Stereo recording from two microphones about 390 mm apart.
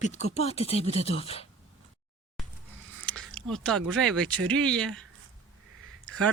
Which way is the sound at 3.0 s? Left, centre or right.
Centre.